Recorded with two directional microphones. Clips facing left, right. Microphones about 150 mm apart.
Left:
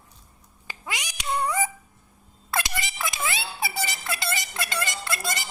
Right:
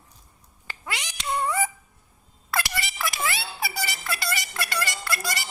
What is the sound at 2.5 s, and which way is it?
Music, 20° left (ahead or behind).